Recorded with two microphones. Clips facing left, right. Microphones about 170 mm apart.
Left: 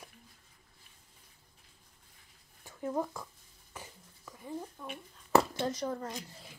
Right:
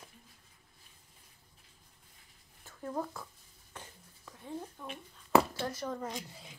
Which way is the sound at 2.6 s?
15° left (ahead or behind).